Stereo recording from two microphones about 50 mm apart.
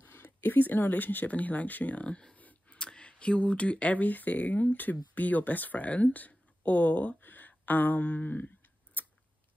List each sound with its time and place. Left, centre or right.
0.0 s speech: left
2.3 s a sound: left
2.8 s speech: centre; by 8.5 s left